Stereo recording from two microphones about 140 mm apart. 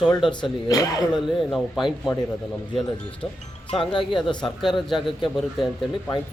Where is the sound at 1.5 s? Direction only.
Centre (ahead or behind).